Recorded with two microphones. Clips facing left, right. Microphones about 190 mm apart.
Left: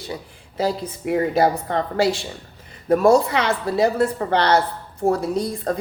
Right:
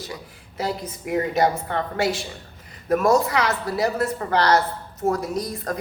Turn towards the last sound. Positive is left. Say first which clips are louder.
# left 4 dB
turn(degrees=30)  # may be behind; listen again after turning